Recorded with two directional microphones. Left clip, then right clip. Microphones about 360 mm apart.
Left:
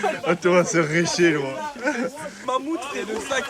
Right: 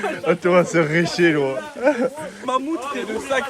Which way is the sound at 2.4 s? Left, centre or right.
Right.